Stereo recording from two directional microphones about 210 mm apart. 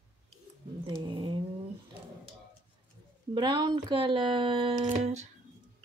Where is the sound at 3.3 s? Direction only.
20° right (ahead or behind).